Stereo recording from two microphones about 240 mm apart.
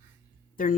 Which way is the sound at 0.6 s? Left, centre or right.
Left.